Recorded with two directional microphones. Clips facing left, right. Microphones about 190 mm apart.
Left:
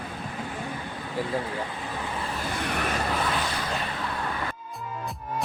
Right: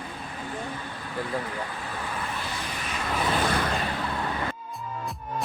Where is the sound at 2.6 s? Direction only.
60° left (ahead or behind).